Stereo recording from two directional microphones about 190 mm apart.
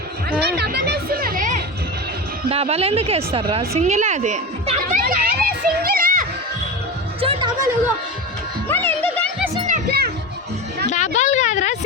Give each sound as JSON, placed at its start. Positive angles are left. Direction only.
{"t": 0.3, "sound": "music", "side_deg": -55}
{"t": 2.5, "sound": "speech", "side_deg": -30}
{"t": 3.8, "sound": "a sound", "side_deg": -35}
{"t": 5.0, "sound": "children playing", "side_deg": -50}
{"t": 7.2, "sound": "music", "side_deg": -25}
{"t": 8.6, "sound": "music", "side_deg": 10}
{"t": 9.6, "sound": "music", "side_deg": -50}
{"t": 10.8, "sound": "a sound", "side_deg": 40}